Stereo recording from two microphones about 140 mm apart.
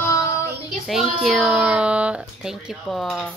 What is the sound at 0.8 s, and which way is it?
A woman's voice, centre (ahead or behind).